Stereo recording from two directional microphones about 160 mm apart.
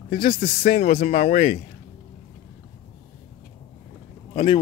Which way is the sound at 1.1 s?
50° left (ahead or behind).